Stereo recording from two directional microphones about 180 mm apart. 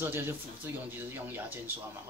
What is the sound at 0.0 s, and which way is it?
Speech, 10° right (ahead or behind).